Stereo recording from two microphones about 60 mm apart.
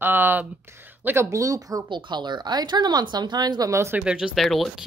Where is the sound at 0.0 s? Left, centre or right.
Right.